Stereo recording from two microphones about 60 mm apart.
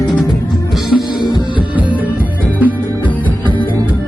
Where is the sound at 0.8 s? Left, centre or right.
Centre.